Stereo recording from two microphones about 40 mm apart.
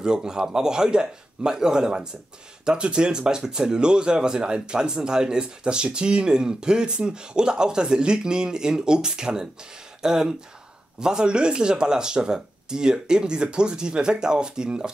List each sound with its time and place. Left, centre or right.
0.0 s a man's voice: centre